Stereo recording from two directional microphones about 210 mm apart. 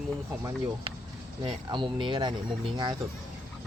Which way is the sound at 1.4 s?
20° right (ahead or behind).